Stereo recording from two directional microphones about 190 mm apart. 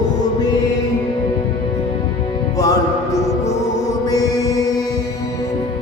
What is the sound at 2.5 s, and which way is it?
Music, 20° left (ahead or behind).